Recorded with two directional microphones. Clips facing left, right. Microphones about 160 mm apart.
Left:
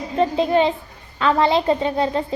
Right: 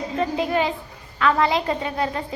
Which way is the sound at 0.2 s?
25° left (ahead or behind).